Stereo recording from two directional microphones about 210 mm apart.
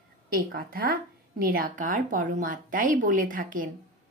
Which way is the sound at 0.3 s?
40° right (ahead or behind).